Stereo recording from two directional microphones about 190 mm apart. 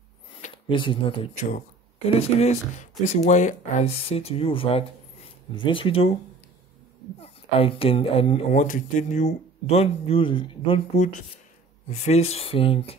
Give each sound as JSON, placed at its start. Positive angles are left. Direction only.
{"t": 0.7, "sound": "speech", "side_deg": 25}
{"t": 7.2, "sound": "speech", "side_deg": 30}
{"t": 11.9, "sound": "speech", "side_deg": 35}